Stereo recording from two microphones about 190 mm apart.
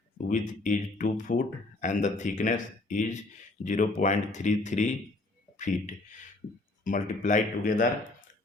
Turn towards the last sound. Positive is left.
turn(degrees=40)  # may be behind; listen again after turning